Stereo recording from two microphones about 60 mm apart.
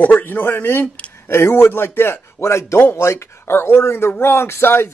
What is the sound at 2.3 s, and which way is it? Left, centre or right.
A man's voice, left.